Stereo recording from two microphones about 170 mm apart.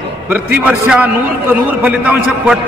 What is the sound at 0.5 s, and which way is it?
A man's voice, 10° right (ahead or behind).